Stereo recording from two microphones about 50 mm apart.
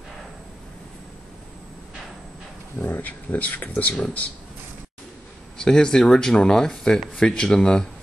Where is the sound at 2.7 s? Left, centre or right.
Left.